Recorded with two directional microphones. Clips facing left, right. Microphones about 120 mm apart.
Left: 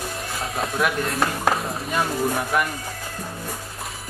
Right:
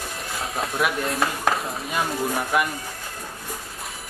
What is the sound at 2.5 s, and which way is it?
Speech, 5° right (ahead or behind).